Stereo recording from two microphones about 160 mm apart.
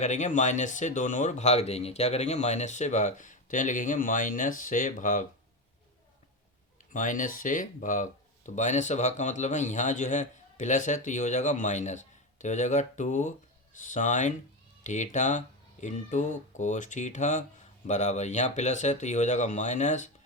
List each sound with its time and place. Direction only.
0.0 s speech: 50° left (ahead or behind)
6.9 s speech: 55° left (ahead or behind)